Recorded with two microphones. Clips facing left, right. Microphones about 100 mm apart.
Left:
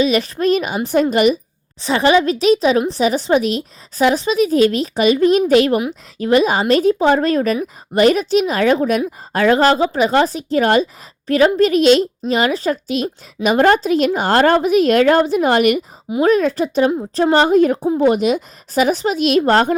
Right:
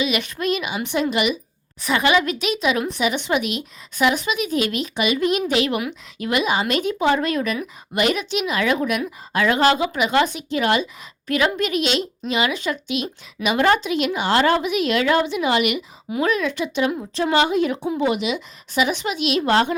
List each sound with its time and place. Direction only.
0.0 s a woman's voice: 35° left (ahead or behind)